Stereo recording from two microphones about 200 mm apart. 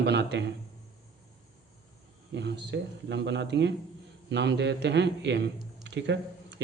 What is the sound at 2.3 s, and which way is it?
A man's voice, 60° right (ahead or behind).